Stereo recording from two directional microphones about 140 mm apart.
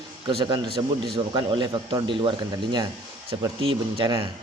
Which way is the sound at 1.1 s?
35° right (ahead or behind).